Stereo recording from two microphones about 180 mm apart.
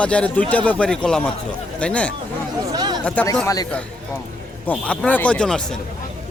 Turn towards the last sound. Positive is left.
turn(degrees=5)  # may be behind; listen again after turning